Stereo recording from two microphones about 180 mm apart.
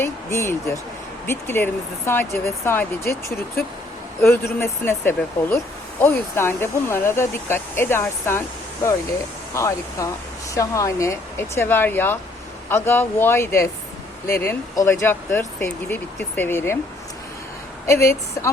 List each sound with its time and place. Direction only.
0.0 s speech: 15° left (ahead or behind)
17.8 s speech: 15° left (ahead or behind)